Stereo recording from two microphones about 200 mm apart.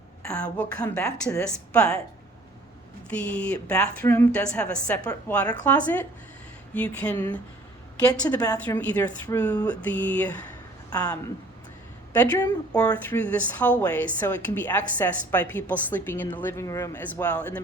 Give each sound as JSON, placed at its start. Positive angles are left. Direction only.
{"t": 0.3, "sound": "speech", "side_deg": 5}
{"t": 3.1, "sound": "speech", "side_deg": 5}
{"t": 8.0, "sound": "a woman's voice", "side_deg": 20}
{"t": 10.8, "sound": "speech", "side_deg": 20}